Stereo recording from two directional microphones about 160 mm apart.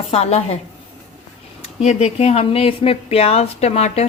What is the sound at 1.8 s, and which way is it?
A woman's voice, 40° left (ahead or behind).